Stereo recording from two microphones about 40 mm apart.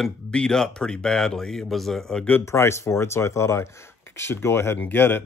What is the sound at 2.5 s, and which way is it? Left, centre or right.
Speech, left.